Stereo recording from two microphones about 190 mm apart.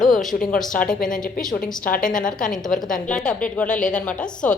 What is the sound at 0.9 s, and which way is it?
A woman's voice, 45° left (ahead or behind).